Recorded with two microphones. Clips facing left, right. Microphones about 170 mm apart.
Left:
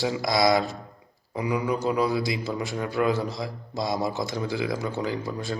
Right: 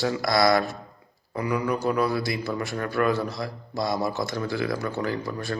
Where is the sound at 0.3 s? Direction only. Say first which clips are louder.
Right 1 dB; 20° left (ahead or behind).